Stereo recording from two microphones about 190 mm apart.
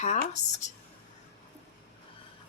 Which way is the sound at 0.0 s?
40° left (ahead or behind).